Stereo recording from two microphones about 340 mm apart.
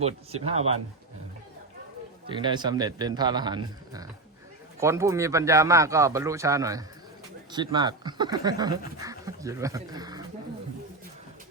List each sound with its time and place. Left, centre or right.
0.5 s speech: centre
2.2 s speech: centre